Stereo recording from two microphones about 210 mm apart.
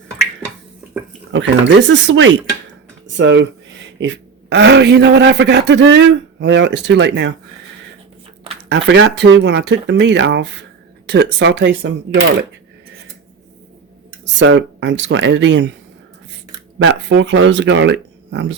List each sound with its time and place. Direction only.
1.3 s a man's voice: 60° right (ahead or behind)
8.7 s a man's voice: 60° right (ahead or behind)
14.3 s a man's voice: 65° right (ahead or behind)
16.7 s a man's voice: 60° right (ahead or behind)